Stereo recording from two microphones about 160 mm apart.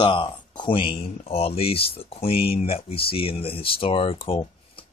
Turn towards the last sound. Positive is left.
turn(degrees=35)  # may be behind; listen again after turning